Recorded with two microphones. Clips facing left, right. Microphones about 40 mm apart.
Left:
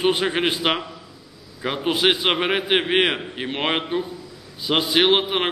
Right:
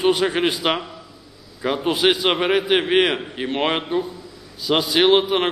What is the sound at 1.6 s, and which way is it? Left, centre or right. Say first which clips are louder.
A man's voice: right 2 dB; centre.